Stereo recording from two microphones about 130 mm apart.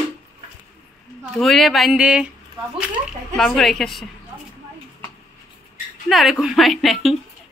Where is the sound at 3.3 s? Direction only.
5° left (ahead or behind).